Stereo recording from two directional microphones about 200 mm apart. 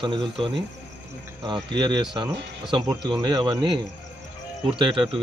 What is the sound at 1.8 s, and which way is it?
Speech, 25° right (ahead or behind).